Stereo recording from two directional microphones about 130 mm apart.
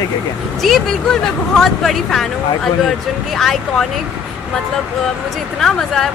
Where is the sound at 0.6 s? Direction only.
Centre (ahead or behind).